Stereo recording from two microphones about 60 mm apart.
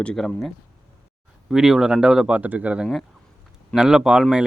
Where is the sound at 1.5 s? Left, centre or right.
Centre.